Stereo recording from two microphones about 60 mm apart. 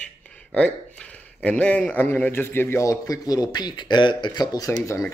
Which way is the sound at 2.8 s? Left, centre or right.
Left.